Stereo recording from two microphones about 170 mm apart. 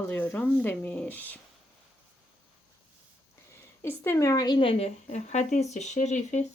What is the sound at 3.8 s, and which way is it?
A woman's voice, 15° left (ahead or behind).